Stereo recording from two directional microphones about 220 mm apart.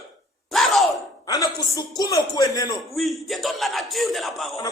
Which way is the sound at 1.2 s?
15° left (ahead or behind).